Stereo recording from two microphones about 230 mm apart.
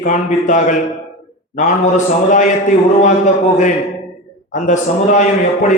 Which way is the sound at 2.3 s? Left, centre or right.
Left.